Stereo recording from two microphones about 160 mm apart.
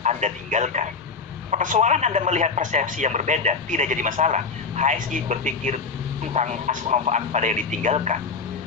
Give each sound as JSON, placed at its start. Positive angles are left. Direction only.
{"t": 0.0, "sound": "a man's voice", "side_deg": -45}